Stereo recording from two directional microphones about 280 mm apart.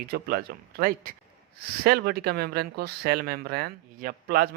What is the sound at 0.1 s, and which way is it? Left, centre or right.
Speech, right.